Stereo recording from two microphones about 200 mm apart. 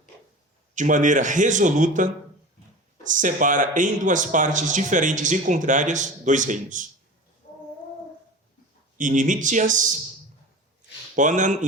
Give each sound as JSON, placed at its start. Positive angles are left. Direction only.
{"t": 0.8, "sound": "speech", "side_deg": -40}
{"t": 9.0, "sound": "speech", "side_deg": -40}
{"t": 11.1, "sound": "speech", "side_deg": -40}